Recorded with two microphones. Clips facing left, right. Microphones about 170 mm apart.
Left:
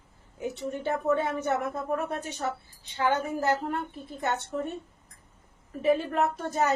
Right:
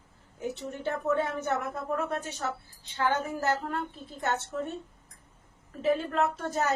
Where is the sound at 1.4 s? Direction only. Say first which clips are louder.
Left 2 dB; 15° left (ahead or behind).